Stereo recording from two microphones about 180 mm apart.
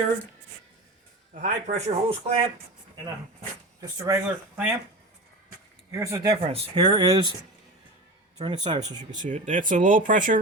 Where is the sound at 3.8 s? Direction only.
20° right (ahead or behind).